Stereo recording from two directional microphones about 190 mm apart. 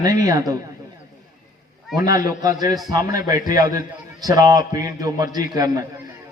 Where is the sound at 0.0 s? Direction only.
20° right (ahead or behind).